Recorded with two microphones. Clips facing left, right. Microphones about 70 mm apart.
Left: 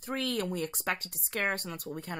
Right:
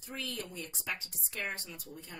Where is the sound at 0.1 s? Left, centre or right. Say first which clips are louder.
Left 9 dB; left.